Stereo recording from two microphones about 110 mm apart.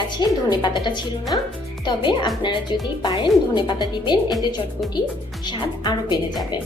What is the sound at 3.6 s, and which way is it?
Speech, 40° left (ahead or behind).